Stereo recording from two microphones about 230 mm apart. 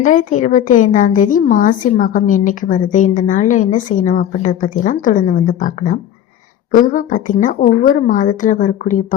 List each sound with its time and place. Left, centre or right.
0.0 s a woman's voice: left